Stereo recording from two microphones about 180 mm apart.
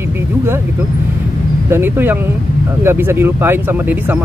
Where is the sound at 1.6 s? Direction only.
10° right (ahead or behind).